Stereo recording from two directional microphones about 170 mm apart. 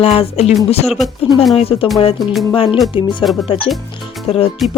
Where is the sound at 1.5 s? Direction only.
35° left (ahead or behind).